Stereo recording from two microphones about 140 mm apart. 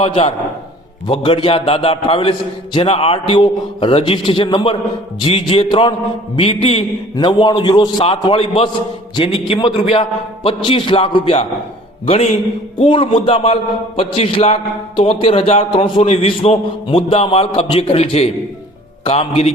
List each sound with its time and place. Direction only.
0.0 s a man's voice: 45° left (ahead or behind)
7.2 s a man's voice: 35° left (ahead or behind)